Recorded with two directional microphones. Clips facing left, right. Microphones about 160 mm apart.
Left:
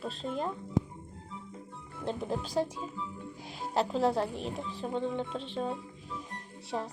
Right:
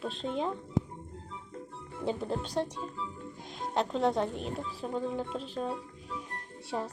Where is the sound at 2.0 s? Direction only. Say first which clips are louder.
Right 1 dB; 5° left (ahead or behind).